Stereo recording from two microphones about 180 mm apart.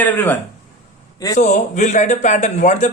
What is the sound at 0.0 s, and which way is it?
Speech, 10° left (ahead or behind).